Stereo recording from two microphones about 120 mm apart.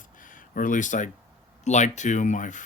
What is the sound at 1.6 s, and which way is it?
Speech, 80° left.